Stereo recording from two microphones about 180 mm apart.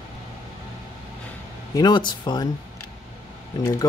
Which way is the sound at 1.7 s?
25° left (ahead or behind).